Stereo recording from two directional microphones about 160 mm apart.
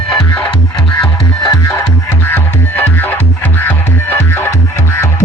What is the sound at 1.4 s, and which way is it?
Music, 20° left (ahead or behind).